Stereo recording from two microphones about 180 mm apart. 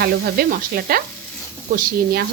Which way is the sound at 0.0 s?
60° right (ahead or behind).